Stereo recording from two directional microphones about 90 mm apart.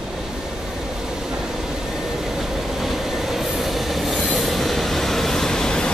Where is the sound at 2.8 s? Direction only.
5° right (ahead or behind).